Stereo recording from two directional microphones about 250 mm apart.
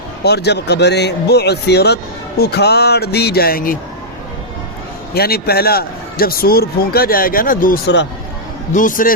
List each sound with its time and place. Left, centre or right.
0.2 s a man's voice: left
5.1 s a man's voice: left